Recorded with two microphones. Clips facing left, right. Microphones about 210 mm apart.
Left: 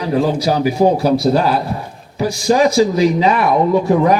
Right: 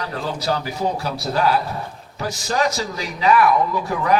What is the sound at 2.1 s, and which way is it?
Speech, 10° left (ahead or behind).